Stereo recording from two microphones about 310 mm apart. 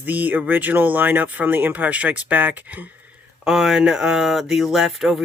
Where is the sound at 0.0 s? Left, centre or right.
Centre.